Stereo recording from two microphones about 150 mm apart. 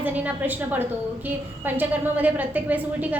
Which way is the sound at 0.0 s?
10° right (ahead or behind).